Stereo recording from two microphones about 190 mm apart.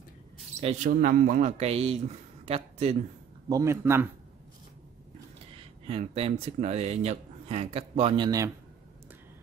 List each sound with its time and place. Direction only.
0.6 s speech: 40° right (ahead or behind)
3.4 s a man's voice: 15° right (ahead or behind)
5.6 s speech: 30° right (ahead or behind)